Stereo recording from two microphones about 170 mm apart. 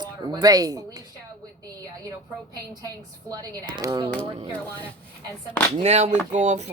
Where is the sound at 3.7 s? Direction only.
25° right (ahead or behind).